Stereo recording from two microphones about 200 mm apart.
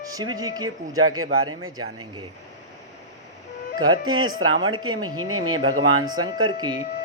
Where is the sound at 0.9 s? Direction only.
90° right.